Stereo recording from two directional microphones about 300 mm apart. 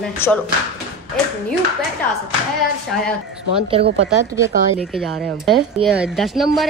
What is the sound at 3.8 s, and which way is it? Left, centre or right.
Speech, right.